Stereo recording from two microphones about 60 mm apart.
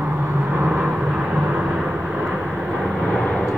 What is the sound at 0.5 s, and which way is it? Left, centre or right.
Vehicle, right.